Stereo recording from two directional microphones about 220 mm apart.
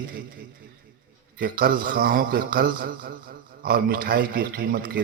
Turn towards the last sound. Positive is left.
turn(degrees=-40)  # may be behind; listen again after turning